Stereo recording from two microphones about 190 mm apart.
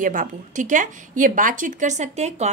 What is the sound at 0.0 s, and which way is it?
Speech, 45° right (ahead or behind).